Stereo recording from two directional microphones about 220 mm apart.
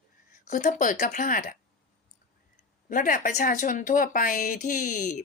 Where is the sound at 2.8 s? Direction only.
40° left (ahead or behind).